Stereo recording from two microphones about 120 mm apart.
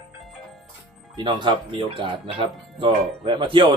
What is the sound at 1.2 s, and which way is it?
Speech, 40° right (ahead or behind).